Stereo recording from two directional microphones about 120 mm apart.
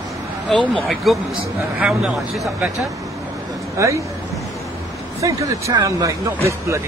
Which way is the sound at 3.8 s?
25° right (ahead or behind).